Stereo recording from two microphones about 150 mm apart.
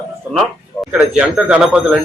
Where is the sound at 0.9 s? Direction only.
5° right (ahead or behind).